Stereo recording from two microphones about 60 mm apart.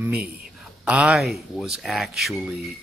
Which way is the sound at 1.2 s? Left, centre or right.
Centre.